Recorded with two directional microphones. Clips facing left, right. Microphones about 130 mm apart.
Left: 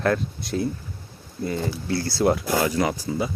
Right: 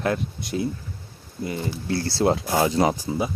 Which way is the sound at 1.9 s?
30° right (ahead or behind).